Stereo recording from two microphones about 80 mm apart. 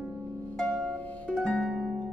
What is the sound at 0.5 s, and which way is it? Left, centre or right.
Harp, centre.